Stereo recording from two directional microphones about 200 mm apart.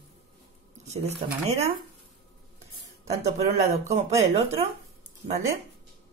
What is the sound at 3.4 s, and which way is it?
Speech, 30° right (ahead or behind).